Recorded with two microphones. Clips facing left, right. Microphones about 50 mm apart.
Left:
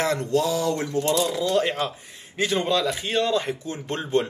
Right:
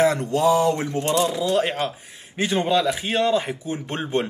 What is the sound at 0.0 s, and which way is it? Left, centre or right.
Speech, right.